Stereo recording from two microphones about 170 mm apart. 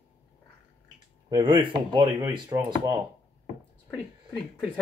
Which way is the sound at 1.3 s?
30° right (ahead or behind).